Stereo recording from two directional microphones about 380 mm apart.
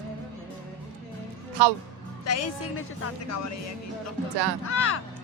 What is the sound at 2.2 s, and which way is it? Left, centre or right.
Speech, left.